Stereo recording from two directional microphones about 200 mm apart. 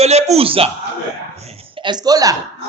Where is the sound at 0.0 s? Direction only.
30° right (ahead or behind).